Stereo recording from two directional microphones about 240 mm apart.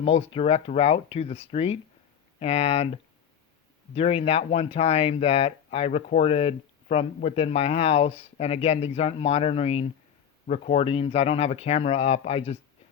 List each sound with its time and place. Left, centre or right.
0.0 s speech: left